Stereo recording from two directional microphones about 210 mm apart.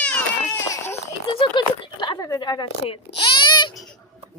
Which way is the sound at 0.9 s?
25° left (ahead or behind).